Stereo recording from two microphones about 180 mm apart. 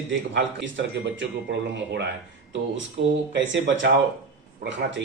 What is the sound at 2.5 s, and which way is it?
A man's voice, 90° right.